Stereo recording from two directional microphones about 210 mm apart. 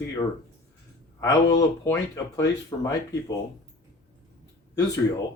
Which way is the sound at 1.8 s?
15° left (ahead or behind).